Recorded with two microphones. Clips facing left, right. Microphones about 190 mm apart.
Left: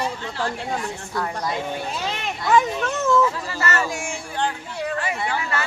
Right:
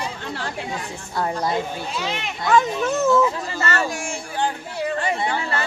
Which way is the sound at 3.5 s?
25° right (ahead or behind).